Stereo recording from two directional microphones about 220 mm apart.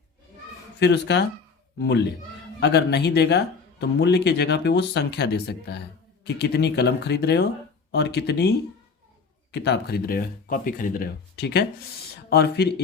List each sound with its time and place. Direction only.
0.8 s speech: 50° left (ahead or behind)